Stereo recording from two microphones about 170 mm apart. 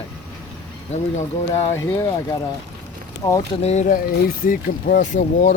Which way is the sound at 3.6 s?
40° left (ahead or behind).